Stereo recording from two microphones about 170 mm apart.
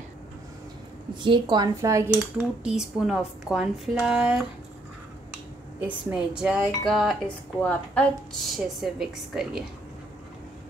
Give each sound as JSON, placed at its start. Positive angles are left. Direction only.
{"t": 1.2, "sound": "speech", "side_deg": -25}
{"t": 2.6, "sound": "a woman's voice", "side_deg": -5}